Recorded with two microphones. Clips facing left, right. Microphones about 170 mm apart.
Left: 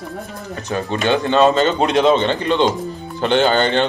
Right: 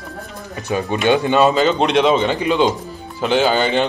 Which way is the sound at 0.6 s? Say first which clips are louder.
Right 2 dB; 15° right (ahead or behind).